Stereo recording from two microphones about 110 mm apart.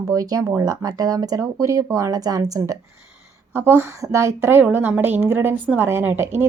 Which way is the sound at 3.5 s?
20° right (ahead or behind).